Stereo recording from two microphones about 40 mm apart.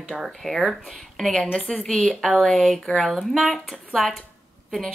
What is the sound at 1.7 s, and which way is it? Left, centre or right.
Speech, left.